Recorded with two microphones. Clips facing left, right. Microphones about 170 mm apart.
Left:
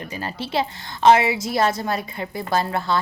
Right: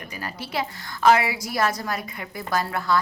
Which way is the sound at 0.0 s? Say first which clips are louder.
Left 5 dB; 25° left (ahead or behind).